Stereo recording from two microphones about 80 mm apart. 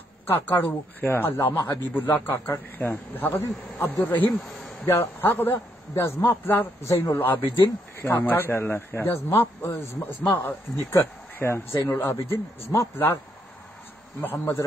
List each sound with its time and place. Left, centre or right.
0.3 s speech: left
4.4 s a sound: centre
4.8 s speech: left
14.2 s speech: left